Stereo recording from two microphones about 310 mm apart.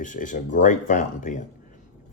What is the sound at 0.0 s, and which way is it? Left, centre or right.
Speech, left.